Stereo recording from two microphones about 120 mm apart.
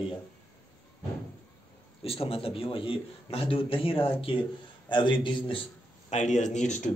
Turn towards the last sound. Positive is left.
turn(degrees=80)